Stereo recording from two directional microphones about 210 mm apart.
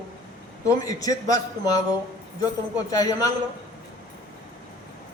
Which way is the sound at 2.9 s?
15° left (ahead or behind).